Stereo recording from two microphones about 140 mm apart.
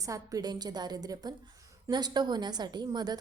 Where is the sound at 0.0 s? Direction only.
25° right (ahead or behind).